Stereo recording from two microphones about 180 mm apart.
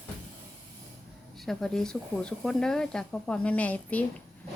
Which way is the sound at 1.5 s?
Centre (ahead or behind).